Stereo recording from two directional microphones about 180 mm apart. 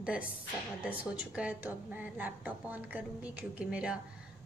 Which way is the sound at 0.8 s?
10° right (ahead or behind).